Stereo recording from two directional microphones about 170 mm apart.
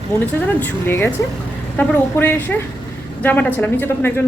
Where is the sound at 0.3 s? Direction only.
10° left (ahead or behind).